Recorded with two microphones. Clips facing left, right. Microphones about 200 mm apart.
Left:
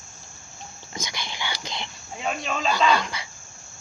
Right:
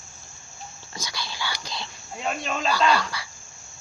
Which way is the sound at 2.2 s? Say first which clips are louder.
Even; centre (ahead or behind).